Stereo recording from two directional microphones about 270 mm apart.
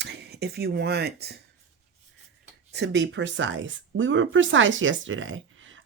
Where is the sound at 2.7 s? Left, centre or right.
Right.